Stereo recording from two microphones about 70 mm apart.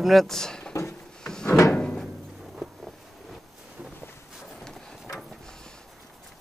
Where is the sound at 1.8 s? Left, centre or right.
Centre.